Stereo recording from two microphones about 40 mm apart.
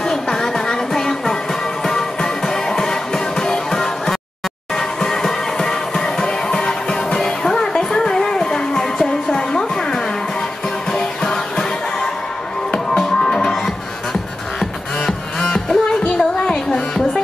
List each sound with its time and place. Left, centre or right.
0.0 s music: centre
14.6 s music: centre